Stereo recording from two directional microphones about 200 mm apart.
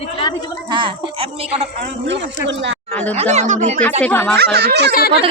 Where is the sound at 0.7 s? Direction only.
25° right (ahead or behind).